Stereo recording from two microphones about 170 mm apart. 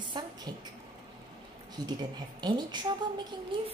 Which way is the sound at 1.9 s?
25° right (ahead or behind).